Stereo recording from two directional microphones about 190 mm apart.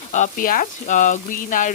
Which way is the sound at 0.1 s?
45° left (ahead or behind).